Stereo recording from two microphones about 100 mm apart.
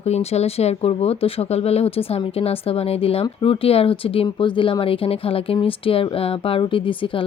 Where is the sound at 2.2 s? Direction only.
70° left (ahead or behind).